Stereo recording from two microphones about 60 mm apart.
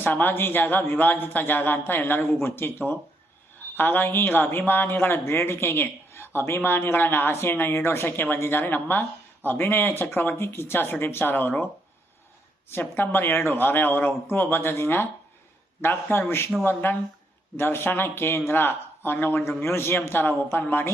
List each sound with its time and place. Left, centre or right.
0.0 s speech: left
12.6 s speech: left